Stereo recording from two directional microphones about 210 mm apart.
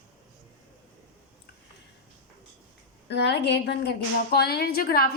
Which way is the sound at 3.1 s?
55° left (ahead or behind).